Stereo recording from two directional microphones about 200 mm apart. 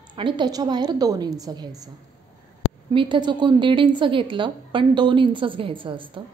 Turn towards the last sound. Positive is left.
turn(degrees=-25)  # may be behind; listen again after turning